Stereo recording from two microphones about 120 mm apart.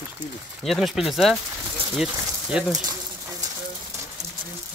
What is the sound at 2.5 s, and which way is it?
Speech, 10° right (ahead or behind).